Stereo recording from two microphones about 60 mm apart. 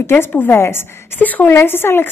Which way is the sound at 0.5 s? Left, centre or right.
Left.